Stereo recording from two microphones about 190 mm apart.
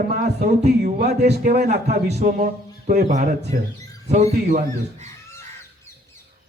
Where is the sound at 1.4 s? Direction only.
40° right (ahead or behind).